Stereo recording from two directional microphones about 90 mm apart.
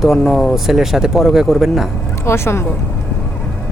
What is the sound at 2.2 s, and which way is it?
Speech, 30° left (ahead or behind).